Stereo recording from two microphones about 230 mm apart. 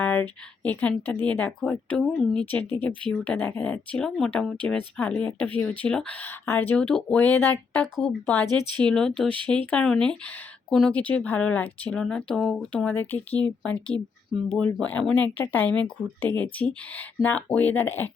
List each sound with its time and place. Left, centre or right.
0.0 s speech: centre
8.4 s a woman's voice: centre
8.8 s speech: centre